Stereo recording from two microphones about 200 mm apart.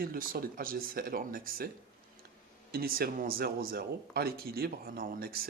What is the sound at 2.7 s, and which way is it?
Speech, 50° right (ahead or behind).